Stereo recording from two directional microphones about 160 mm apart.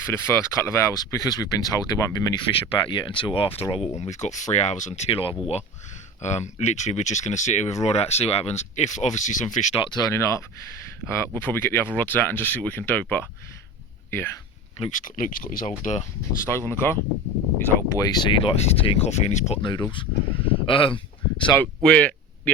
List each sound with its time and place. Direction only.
0.0 s speech: 15° left (ahead or behind); by 9.7 s 50° left (ahead or behind)
9.8 s speech: 25° left (ahead or behind)
14.8 s speech: 55° left (ahead or behind)
15.8 s speech: 45° left (ahead or behind)
16.5 s speech: 15° left (ahead or behind)
17.9 s speech: 25° left (ahead or behind); by 19.5 s 45° left (ahead or behind)
19.9 s speech: 30° left (ahead or behind)
21.8 s a sound: 5° left (ahead or behind)